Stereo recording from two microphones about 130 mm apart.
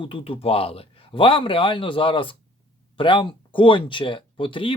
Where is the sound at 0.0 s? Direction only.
40° left (ahead or behind).